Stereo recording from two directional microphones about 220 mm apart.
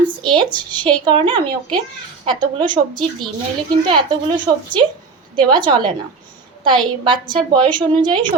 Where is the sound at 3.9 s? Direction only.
20° right (ahead or behind).